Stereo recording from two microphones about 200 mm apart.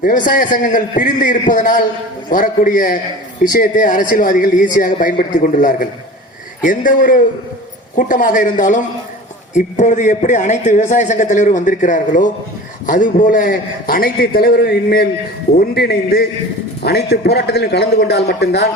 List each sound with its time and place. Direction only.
0.0 s a man's voice: 40° left (ahead or behind)